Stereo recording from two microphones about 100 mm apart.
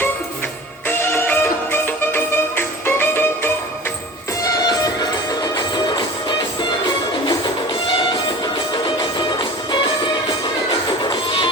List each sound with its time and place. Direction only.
0.9 s music: 25° left (ahead or behind)
4.4 s music: 40° left (ahead or behind)
8.7 s music: 55° left (ahead or behind)